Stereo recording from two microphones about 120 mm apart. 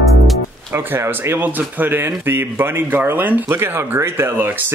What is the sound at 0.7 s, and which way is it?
Speech, 20° right (ahead or behind).